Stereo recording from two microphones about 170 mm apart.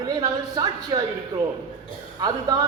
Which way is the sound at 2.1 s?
25° right (ahead or behind).